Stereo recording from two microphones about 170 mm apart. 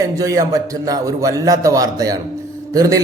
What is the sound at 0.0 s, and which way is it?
A man's voice, 20° right (ahead or behind).